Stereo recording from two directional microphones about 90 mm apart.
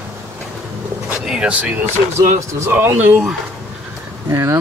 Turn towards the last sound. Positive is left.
turn(degrees=-35)  # may be behind; listen again after turning